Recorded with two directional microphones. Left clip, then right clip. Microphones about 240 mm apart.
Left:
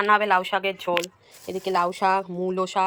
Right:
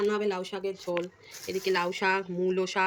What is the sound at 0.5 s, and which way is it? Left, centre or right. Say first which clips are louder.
Speech: left 8 dB; left.